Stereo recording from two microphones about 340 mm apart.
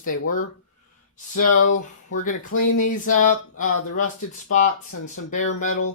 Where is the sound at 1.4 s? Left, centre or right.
Left.